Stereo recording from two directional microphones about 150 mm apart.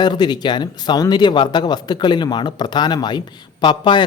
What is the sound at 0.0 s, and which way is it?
Speech, 30° left (ahead or behind).